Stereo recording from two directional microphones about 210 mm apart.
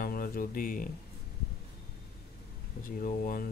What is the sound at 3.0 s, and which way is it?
Speech, 40° left (ahead or behind).